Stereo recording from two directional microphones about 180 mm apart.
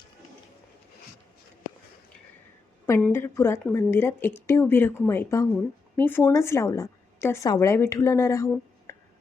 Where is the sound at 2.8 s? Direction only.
15° left (ahead or behind).